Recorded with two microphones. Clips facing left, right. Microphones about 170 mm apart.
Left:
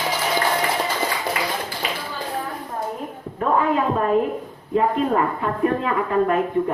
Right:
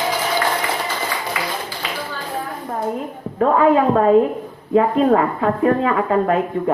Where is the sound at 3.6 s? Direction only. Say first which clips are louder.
Right 7 dB; 90° right.